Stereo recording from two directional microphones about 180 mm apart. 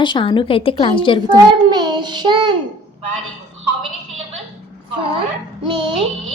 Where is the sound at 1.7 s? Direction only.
25° right (ahead or behind).